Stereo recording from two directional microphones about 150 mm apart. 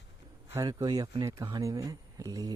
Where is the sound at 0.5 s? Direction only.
25° right (ahead or behind).